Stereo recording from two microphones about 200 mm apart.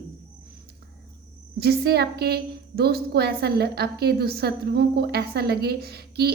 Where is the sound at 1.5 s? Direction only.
50° right (ahead or behind).